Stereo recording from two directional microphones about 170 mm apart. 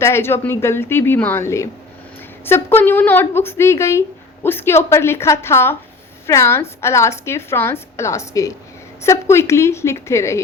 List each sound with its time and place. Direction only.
0.0 s a woman's voice: 15° left (ahead or behind)